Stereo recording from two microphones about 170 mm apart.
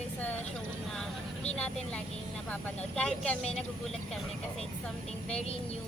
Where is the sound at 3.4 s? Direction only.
40° left (ahead or behind).